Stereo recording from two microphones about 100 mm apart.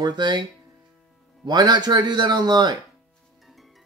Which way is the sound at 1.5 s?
45° right (ahead or behind).